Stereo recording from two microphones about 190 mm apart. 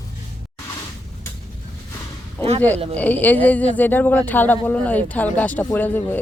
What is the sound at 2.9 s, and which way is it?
Speech, 10° left (ahead or behind).